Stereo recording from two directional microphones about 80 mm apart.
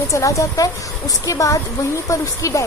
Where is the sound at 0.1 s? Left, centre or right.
Left.